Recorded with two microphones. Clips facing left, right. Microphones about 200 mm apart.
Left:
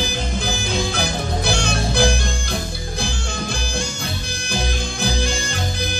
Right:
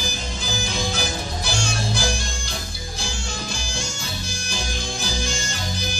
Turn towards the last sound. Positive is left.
turn(degrees=60)  # may be behind; listen again after turning